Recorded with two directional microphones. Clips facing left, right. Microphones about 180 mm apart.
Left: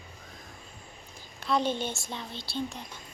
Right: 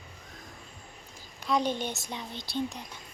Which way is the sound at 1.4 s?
10° right (ahead or behind).